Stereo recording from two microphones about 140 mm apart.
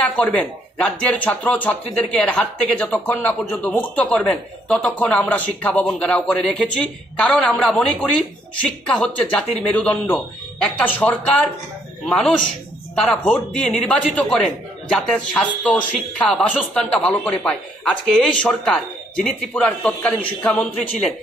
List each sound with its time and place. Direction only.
0.2 s a man's voice: 10° left (ahead or behind)